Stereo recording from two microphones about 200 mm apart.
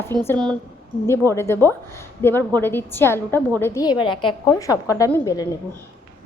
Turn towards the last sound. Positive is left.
turn(degrees=15)  # may be behind; listen again after turning